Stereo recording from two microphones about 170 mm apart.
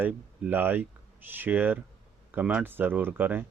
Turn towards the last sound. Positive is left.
turn(degrees=-10)  # may be behind; listen again after turning